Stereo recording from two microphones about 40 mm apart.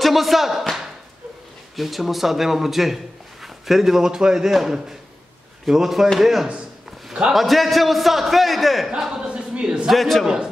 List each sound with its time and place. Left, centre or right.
0.0 s speech: centre
1.8 s a man's voice: centre
9.1 s a sound: right
9.8 s a man's voice: centre